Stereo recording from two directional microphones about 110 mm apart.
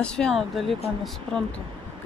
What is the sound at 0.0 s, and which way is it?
Speech, 5° left (ahead or behind).